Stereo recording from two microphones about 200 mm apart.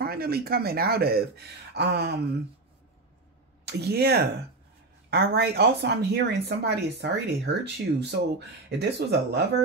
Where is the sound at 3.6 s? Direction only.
55° right (ahead or behind).